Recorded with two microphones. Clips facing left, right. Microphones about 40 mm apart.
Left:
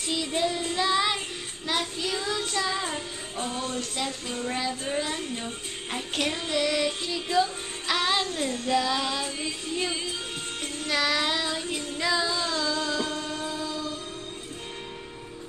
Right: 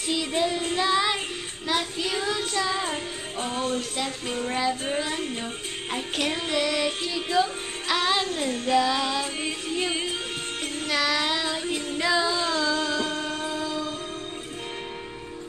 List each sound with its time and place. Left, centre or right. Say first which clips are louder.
0.0 s female singing: right 2 dB; centre
0.7 s child singing: right 1 dB; centre
1.7 s female singing: right 2 dB; centre
2.8 s music: right 2 dB; right
4.5 s female singing: right 3 dB; centre
5.3 s speech: right 2 dB; centre
6.3 s female singing: right 1 dB; centre
7.8 s music: right 1 dB; centre
8.7 s female singing: right 3 dB; centre
9.4 s music: right 2 dB; right
10.9 s child singing: right 1 dB; centre
11.7 s music: right 4 dB; centre
13.3 s music: right 2 dB; right
13.6 s music: right 3 dB; right